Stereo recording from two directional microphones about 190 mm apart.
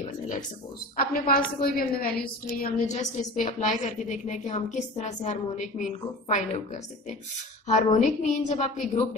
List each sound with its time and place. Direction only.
0.9 s a woman's voice: 50° left (ahead or behind)
7.6 s a woman's voice: 40° left (ahead or behind)